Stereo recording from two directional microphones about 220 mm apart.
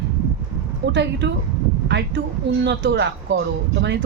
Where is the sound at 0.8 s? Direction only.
55° right (ahead or behind).